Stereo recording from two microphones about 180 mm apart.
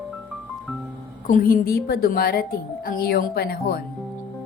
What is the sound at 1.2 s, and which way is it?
A woman's voice, 50° left (ahead or behind).